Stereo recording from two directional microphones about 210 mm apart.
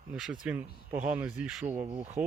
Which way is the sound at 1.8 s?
30° right (ahead or behind).